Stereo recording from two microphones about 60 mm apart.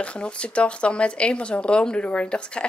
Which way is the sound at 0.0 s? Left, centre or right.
Centre.